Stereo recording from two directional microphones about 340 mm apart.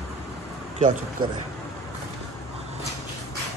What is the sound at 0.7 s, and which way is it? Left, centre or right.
Speech, centre.